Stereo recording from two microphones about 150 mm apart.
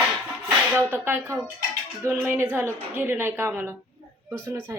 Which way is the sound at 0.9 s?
15° right (ahead or behind).